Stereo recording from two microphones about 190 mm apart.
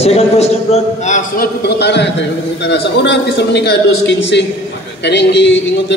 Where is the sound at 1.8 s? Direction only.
65° left (ahead or behind).